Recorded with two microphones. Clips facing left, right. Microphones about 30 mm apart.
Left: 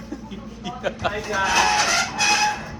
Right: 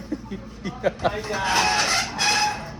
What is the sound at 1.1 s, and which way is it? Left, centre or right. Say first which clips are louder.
Speech: even; right.